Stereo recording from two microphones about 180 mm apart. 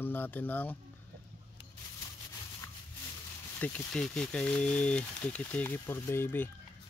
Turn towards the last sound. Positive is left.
turn(degrees=10)  # may be behind; listen again after turning